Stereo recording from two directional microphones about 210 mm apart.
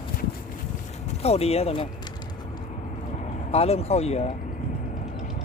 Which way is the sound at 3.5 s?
30° left (ahead or behind).